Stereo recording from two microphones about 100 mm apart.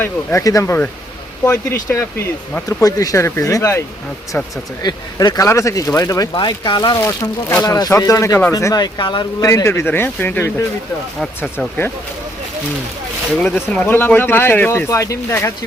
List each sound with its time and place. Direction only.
0.0 s speech: 20° left (ahead or behind)
2.6 s speech: 35° left (ahead or behind)
4.8 s speech: 45° left (ahead or behind)
5.5 s speech: 30° left (ahead or behind)
6.3 s speech: 50° left (ahead or behind)
7.2 s speech: 25° left (ahead or behind)
7.6 s speech: 35° left (ahead or behind)
9.4 s speech: 30° left (ahead or behind)
13.4 s speech: 15° left (ahead or behind)